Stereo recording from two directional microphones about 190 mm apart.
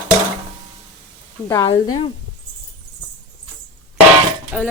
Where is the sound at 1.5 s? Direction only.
20° left (ahead or behind).